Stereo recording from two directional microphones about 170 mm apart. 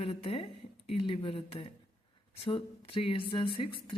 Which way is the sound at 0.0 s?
35° left (ahead or behind).